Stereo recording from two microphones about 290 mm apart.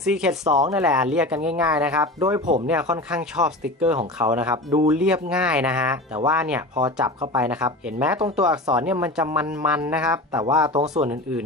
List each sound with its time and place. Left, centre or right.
0.0 s speech: centre
10.7 s speech: right